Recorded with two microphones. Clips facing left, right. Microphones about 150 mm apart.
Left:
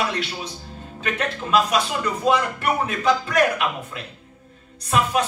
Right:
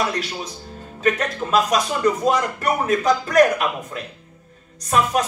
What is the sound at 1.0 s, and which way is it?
Speech, 40° right (ahead or behind).